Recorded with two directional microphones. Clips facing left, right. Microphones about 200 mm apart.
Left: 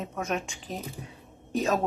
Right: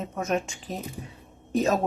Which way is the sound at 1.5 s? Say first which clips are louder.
Right 3 dB; centre (ahead or behind).